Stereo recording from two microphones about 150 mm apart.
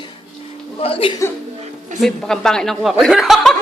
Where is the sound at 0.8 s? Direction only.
40° left (ahead or behind).